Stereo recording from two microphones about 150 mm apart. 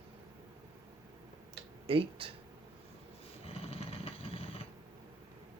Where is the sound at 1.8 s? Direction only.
40° right (ahead or behind).